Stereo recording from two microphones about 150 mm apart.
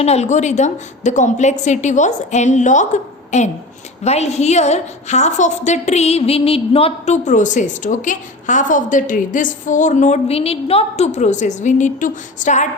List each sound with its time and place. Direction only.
0.0 s a woman's voice: 45° left (ahead or behind)